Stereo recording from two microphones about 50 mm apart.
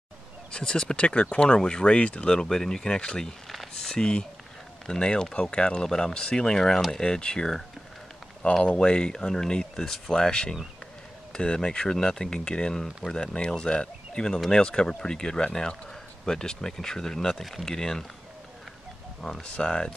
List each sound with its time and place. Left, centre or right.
0.5 s speech: centre
3.4 s a sound: centre
3.8 s speech: centre
8.6 s speech: left
19.4 s speech: left